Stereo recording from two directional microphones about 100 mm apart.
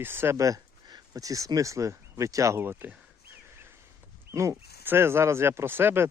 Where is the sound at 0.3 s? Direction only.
35° right (ahead or behind).